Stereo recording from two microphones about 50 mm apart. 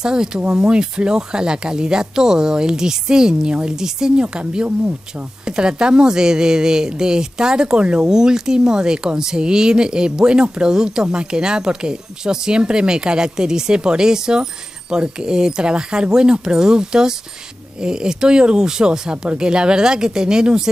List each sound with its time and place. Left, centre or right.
0.0 s a woman's voice: centre